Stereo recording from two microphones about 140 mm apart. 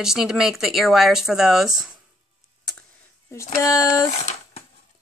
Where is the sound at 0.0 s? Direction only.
5° right (ahead or behind).